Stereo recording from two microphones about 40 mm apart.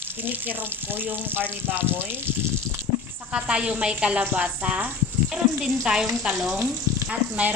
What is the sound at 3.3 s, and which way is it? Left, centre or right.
Speech, right.